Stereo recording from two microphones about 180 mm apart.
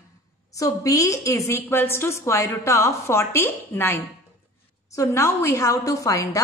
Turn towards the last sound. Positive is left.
turn(degrees=20)  # may be behind; listen again after turning